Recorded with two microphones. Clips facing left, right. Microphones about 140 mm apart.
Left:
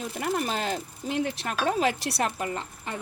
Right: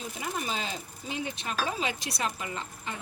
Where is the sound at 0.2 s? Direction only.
65° left (ahead or behind).